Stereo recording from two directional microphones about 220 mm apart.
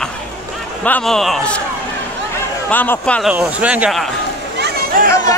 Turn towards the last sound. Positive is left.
turn(degrees=-45)  # may be behind; listen again after turning